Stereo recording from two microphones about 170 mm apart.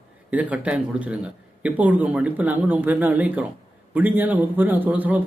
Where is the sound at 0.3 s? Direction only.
10° right (ahead or behind).